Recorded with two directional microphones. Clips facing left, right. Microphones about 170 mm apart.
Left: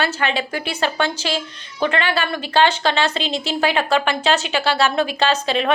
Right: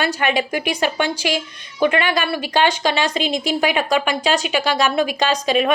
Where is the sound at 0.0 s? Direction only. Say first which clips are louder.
Right 2 dB; 15° right (ahead or behind).